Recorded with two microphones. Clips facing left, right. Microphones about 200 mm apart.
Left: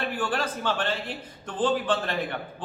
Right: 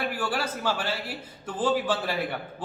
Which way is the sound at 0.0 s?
10° right (ahead or behind).